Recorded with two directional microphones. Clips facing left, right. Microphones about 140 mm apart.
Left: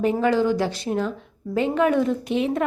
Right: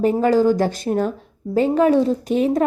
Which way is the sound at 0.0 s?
40° right (ahead or behind).